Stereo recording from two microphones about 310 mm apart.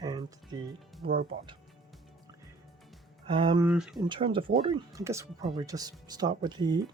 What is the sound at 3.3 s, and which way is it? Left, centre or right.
Speech, centre.